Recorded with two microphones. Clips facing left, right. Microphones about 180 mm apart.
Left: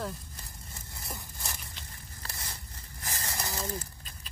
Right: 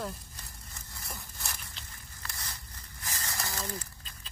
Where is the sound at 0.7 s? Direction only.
25° left (ahead or behind).